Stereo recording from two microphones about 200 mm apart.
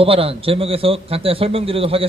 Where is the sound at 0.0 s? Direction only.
30° right (ahead or behind).